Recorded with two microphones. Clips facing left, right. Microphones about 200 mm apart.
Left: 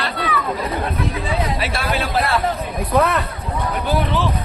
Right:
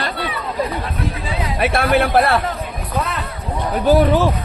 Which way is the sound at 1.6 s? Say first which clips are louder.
Right 6 dB; 60° right (ahead or behind).